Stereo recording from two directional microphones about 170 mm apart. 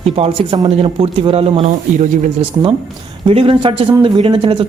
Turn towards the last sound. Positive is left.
turn(degrees=-30)  # may be behind; listen again after turning